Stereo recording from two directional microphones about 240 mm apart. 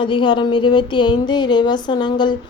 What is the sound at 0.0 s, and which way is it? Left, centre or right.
Speech, centre.